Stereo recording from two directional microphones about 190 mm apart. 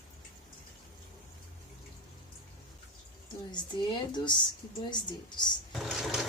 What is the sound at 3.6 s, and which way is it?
A woman's voice, 25° left (ahead or behind).